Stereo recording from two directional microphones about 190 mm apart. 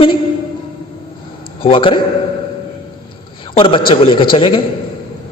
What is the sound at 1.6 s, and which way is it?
Speech, 30° left (ahead or behind).